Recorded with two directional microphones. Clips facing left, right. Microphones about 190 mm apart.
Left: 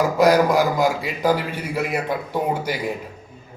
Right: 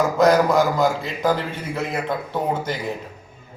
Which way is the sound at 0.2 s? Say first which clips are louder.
Even; 10° left (ahead or behind).